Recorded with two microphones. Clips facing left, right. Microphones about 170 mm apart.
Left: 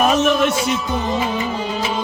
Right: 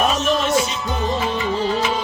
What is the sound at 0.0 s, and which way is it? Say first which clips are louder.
Music: left 4 dB; 65° left (ahead or behind).